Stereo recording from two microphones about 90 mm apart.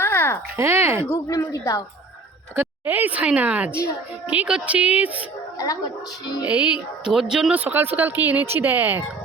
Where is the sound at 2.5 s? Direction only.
25° right (ahead or behind).